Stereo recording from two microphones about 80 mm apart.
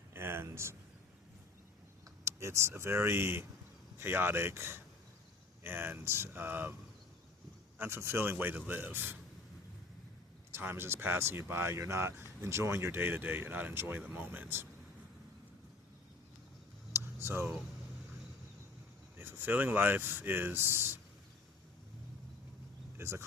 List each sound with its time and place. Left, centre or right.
0.1 s a sound: right
2.2 s speech: right
7.8 s speech: right
10.5 s speech: right
16.9 s vehicle: right
19.2 s speech: right
23.0 s speech: right